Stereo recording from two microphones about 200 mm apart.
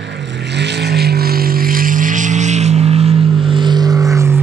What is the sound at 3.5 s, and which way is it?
Vehicle, 20° right (ahead or behind).